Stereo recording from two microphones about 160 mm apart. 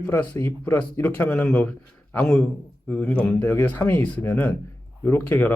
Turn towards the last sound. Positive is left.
turn(degrees=10)  # may be behind; listen again after turning